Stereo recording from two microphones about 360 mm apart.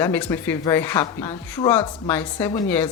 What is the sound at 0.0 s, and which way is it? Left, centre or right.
A woman's voice, centre.